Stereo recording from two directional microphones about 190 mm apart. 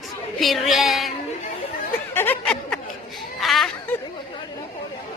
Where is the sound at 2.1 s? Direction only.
10° left (ahead or behind).